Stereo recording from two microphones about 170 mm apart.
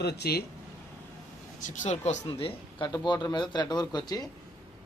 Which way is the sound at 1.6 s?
45° left (ahead or behind).